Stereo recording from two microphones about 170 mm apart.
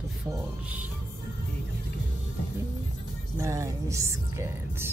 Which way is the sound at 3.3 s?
15° right (ahead or behind).